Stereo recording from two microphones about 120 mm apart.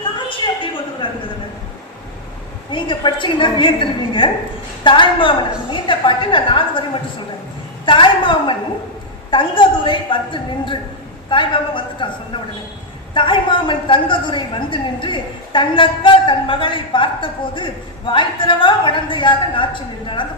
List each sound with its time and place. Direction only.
0.3 s a sound: 45° left (ahead or behind)
2.7 s a woman's voice: 40° left (ahead or behind)
7.9 s a woman's voice: 45° left (ahead or behind)